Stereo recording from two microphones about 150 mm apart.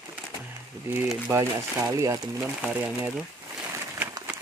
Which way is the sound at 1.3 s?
20° right (ahead or behind).